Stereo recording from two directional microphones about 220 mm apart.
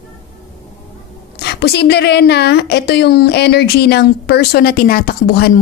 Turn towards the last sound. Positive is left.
turn(degrees=45)  # may be behind; listen again after turning